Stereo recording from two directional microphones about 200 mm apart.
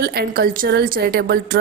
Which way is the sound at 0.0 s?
50° right (ahead or behind).